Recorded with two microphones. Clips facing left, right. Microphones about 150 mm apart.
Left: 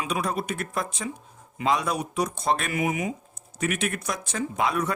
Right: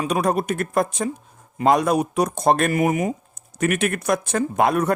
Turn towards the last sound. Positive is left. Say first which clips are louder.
# right 7 dB
turn(degrees=-50)  # may be behind; listen again after turning